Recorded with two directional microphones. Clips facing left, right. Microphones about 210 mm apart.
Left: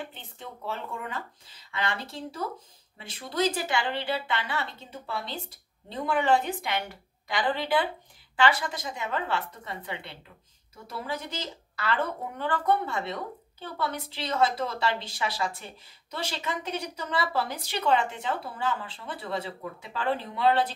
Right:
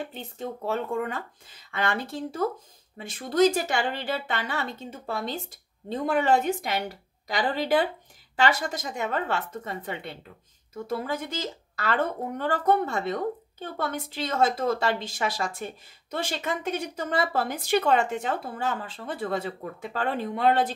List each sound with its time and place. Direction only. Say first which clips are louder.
0.0 s a woman's voice: right 7 dB; 45° right (ahead or behind)